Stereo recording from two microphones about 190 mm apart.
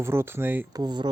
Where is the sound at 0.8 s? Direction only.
20° right (ahead or behind).